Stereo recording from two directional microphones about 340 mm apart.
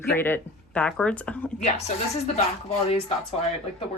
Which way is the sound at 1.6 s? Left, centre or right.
Centre.